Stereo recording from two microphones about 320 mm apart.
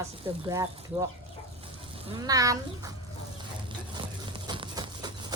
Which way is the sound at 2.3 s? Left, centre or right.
Centre.